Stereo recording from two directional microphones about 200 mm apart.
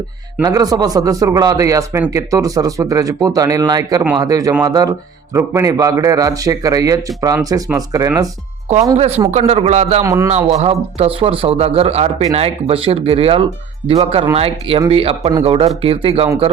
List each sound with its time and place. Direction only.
0.4 s a man's voice: 20° right (ahead or behind)
9.0 s a man's voice: 30° right (ahead or behind)
10.0 s a man's voice: 15° right (ahead or behind)
10.2 s speech: 30° right (ahead or behind)